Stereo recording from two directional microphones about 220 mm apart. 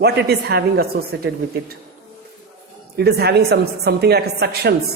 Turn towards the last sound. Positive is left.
turn(degrees=-50)  # may be behind; listen again after turning